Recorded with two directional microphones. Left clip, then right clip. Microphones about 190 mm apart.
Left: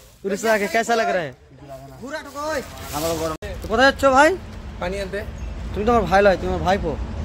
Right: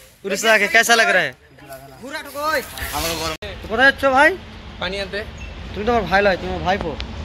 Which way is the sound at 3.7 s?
10° left (ahead or behind).